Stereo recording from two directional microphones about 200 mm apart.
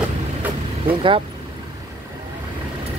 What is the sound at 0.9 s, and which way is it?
Speech, 25° right (ahead or behind).